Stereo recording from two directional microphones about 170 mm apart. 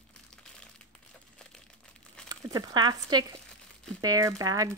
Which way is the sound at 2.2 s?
25° right (ahead or behind).